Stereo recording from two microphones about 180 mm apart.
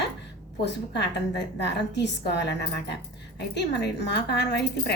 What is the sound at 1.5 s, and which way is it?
Speech, 70° left (ahead or behind).